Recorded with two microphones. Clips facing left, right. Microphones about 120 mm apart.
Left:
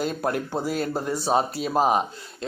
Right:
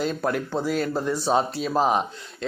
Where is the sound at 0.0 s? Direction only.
45° left (ahead or behind).